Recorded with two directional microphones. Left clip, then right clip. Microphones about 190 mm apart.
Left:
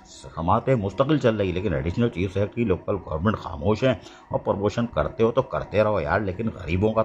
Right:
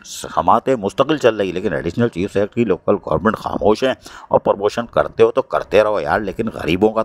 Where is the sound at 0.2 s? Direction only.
45° right (ahead or behind).